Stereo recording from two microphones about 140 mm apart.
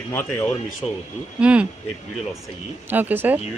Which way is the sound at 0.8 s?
35° left (ahead or behind).